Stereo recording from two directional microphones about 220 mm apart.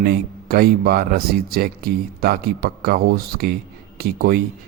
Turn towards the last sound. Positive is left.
turn(degrees=-45)  # may be behind; listen again after turning